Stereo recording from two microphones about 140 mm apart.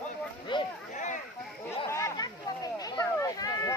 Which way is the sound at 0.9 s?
60° left (ahead or behind).